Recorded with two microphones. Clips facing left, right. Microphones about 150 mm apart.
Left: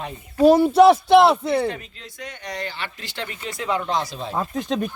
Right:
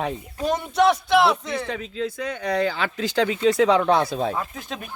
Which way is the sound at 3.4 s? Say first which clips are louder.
Right 8 dB; 90° right.